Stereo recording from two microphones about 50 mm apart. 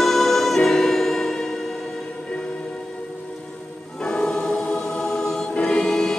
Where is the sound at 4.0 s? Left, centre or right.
Centre.